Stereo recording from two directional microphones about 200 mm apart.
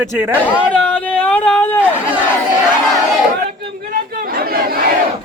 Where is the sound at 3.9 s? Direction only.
45° right (ahead or behind).